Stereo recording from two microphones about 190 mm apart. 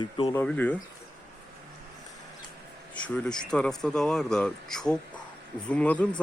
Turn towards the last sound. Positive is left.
turn(degrees=5)  # may be behind; listen again after turning